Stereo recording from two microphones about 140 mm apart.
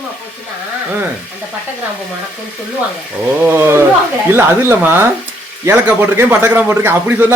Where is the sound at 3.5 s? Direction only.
15° right (ahead or behind).